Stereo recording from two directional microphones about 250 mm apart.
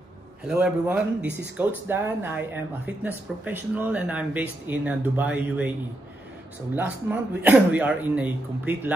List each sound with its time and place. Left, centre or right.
0.5 s speech: centre
6.7 s speech: centre